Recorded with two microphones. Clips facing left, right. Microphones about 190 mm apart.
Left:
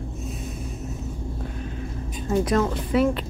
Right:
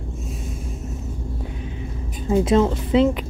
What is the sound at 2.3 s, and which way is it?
Speech, 20° right (ahead or behind).